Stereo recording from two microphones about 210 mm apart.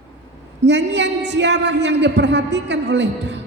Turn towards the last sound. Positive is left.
turn(degrees=-55)  # may be behind; listen again after turning